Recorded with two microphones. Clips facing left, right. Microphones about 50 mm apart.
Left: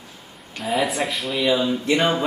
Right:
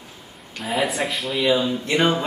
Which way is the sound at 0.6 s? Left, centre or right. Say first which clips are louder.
Left 1 dB; centre.